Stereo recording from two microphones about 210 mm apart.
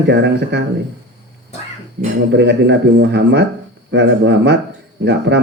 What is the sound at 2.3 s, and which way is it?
A man's voice, 55° right (ahead or behind).